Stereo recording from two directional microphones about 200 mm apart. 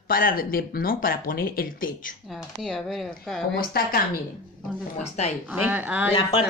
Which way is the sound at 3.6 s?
45° left (ahead or behind).